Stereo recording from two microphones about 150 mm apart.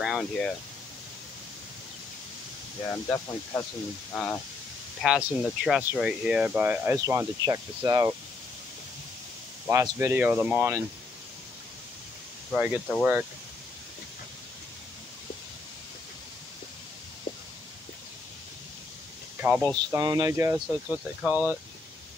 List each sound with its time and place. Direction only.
0.0 s speech: centre (ahead or behind)
2.9 s speech: 20° left (ahead or behind)
5.0 s speech: 5° right (ahead or behind); by 8.1 s 25° right (ahead or behind)
9.7 s speech: 20° right (ahead or behind)
12.5 s speech: 5° right (ahead or behind)
19.4 s speech: 15° right (ahead or behind)
19.9 s speech: 25° right (ahead or behind)
20.5 s speech: 5° right (ahead or behind)